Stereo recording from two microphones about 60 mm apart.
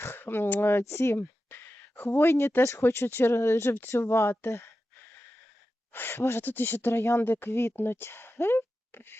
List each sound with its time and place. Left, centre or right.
0.2 s speech: left
0.9 s speech: left
1.5 s a sound: left
2.0 s speech: left
5.9 s speech: left
6.1 s speech: left
6.4 s speech: left
6.9 s speech: left
7.2 s speech: left